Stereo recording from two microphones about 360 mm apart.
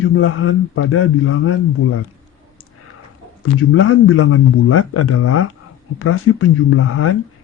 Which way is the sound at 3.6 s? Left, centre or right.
Left.